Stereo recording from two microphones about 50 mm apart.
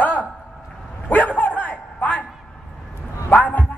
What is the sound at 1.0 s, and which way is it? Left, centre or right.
Bow-wow, left.